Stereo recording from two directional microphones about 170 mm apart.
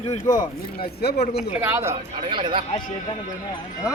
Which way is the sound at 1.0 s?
70° left (ahead or behind).